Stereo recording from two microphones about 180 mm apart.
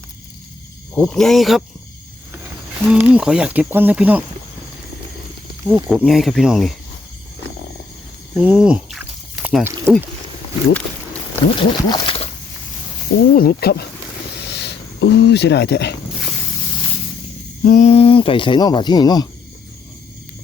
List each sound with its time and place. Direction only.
0.9 s speech: centre (ahead or behind)
5.6 s speech: 5° right (ahead or behind)
8.4 s a sound: 5° right (ahead or behind)
9.6 s speech: 15° right (ahead or behind)
11.5 s speech: 30° left (ahead or behind)
13.3 s speech: 55° left (ahead or behind)
14.4 s a sound: 70° left (ahead or behind)
17.6 s speech: 45° left (ahead or behind); by 19.3 s 20° left (ahead or behind)